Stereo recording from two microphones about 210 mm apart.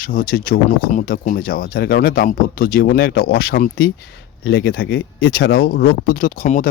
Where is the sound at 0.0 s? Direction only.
40° left (ahead or behind).